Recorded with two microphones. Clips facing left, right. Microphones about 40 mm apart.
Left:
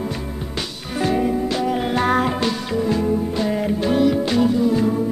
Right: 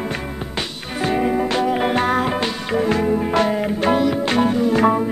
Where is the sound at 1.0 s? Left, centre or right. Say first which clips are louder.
Even; right.